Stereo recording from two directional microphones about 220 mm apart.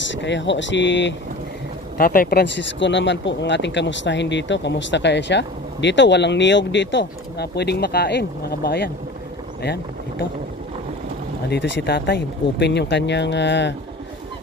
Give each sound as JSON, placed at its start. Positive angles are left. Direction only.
{"t": 0.1, "sound": "speech", "side_deg": 55}
{"t": 2.0, "sound": "speech", "side_deg": 40}
{"t": 11.4, "sound": "speech", "side_deg": 50}